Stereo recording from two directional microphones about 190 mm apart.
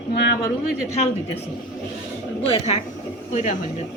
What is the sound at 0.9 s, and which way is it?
Speech, 35° left (ahead or behind).